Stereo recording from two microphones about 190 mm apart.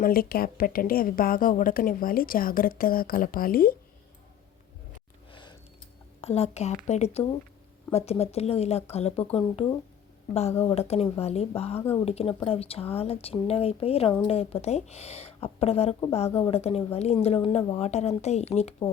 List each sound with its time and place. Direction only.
0.0 s a woman's voice: 50° left (ahead or behind)
5.3 s a sound: 25° left (ahead or behind)
6.2 s speech: 35° left (ahead or behind)